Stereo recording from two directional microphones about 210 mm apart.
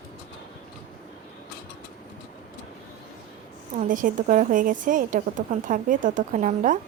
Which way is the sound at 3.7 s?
40° right (ahead or behind).